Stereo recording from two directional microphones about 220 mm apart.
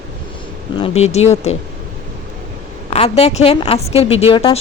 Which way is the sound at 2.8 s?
30° left (ahead or behind).